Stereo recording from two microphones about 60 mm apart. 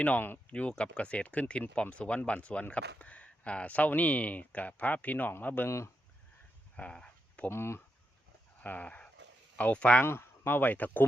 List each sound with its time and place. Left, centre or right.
0.0 s speech: left
0.5 s speech: centre
5.6 s speech: left
6.7 s a sound: centre
7.5 s speech: left
8.6 s speech: left
10.0 s speech: left